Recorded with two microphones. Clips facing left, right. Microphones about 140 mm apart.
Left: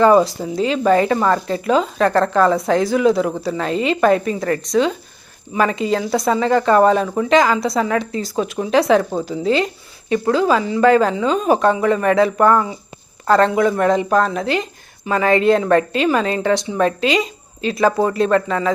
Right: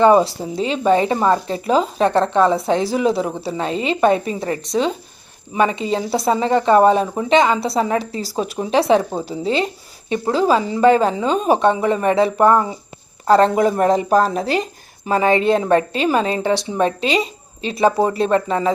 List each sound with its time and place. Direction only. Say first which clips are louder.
0.0 s speech: even; 25° right (ahead or behind)